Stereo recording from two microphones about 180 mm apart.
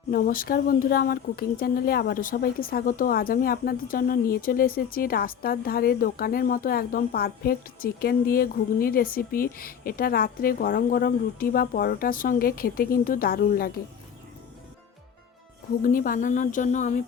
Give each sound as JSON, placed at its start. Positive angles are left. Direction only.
{"t": 0.1, "sound": "speech", "side_deg": 50}
{"t": 15.8, "sound": "a woman's voice", "side_deg": 50}